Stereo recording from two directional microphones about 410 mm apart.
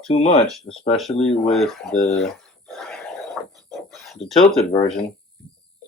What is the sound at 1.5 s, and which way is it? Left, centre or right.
Speech, centre.